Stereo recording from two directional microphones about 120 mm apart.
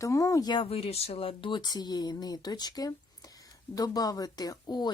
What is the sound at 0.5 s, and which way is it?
Speech, 50° left (ahead or behind).